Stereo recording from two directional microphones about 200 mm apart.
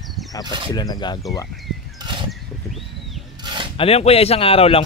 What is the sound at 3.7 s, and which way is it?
Speech, 30° left (ahead or behind).